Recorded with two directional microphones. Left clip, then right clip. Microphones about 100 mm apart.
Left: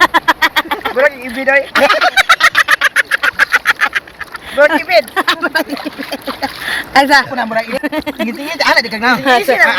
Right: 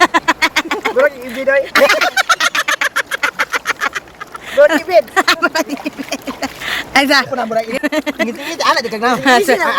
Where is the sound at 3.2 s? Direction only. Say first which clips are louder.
Left 5 dB; 10° right (ahead or behind).